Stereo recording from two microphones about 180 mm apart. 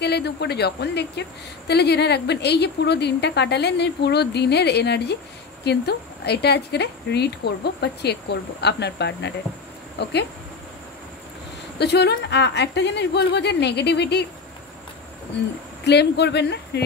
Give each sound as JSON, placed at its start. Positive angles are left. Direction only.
{"t": 0.0, "sound": "a woman's voice", "side_deg": 65}
{"t": 11.8, "sound": "a woman's voice", "side_deg": 65}
{"t": 15.8, "sound": "a woman's voice", "side_deg": 70}